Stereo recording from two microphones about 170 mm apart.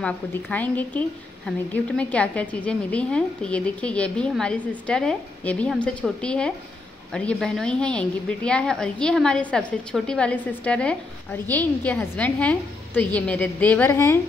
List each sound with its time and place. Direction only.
0.0 s a woman's voice: 10° left (ahead or behind)